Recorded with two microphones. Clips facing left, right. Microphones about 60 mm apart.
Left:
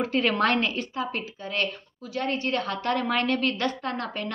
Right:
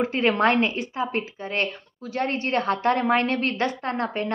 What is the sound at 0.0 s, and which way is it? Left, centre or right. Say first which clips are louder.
A woman's voice: right 3 dB; right.